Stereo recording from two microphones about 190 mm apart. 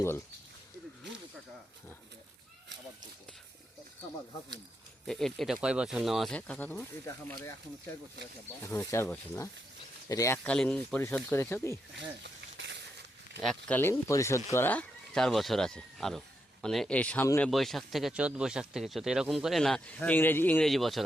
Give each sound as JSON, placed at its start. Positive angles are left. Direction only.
{"t": 5.0, "sound": "speech", "side_deg": 0}
{"t": 8.7, "sound": "speech", "side_deg": 15}
{"t": 11.9, "sound": "a sound", "side_deg": -70}
{"t": 13.4, "sound": "speech", "side_deg": 5}
{"t": 17.5, "sound": "speech", "side_deg": 0}